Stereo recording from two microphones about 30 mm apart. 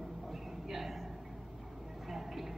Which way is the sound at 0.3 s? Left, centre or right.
Centre.